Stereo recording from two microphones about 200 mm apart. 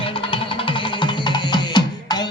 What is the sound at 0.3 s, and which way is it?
Music, 25° left (ahead or behind).